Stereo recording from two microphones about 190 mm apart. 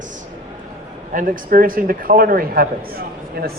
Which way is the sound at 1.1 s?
50° right (ahead or behind).